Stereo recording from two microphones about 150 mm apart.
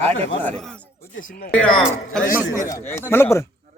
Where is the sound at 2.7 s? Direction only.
15° left (ahead or behind).